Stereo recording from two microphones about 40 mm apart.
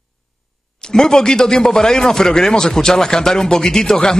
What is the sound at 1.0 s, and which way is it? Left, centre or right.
Speech, centre.